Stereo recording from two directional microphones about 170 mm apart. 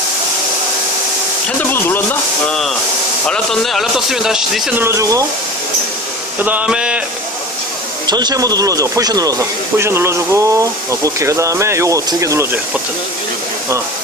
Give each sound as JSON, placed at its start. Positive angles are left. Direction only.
{"t": 2.5, "sound": "a man's voice", "side_deg": 0}
{"t": 4.8, "sound": "speech", "side_deg": -15}
{"t": 6.4, "sound": "speech", "side_deg": -10}
{"t": 8.0, "sound": "speech", "side_deg": -25}